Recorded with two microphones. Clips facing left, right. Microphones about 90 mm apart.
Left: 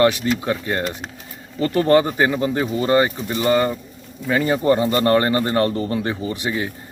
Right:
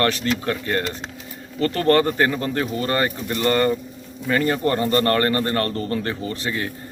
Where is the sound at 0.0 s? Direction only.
10° left (ahead or behind).